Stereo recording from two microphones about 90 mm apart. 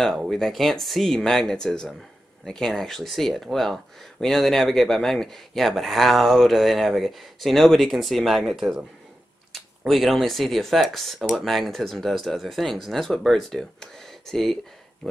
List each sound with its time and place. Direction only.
0.3 s speech: 5° left (ahead or behind)